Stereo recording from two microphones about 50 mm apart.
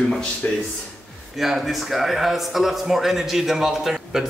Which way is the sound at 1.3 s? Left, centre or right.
Centre.